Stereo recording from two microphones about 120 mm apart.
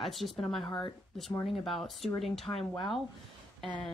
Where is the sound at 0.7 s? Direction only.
40° left (ahead or behind).